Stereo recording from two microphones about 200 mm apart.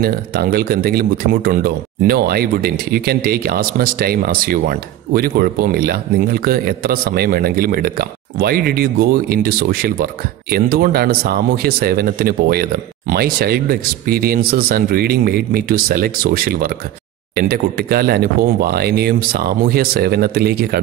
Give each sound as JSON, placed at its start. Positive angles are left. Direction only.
{"t": 0.0, "sound": "speech", "side_deg": -50}